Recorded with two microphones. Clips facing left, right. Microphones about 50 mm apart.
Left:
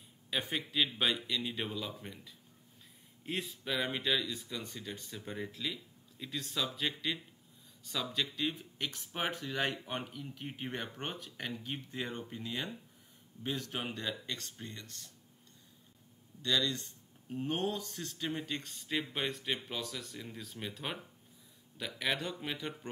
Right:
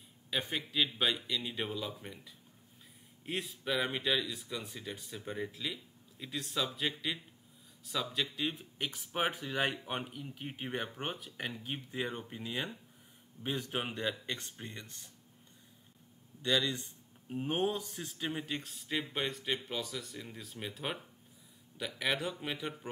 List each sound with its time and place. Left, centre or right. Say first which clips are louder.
0.3 s speech: even; centre
16.4 s speech: right 1 dB; centre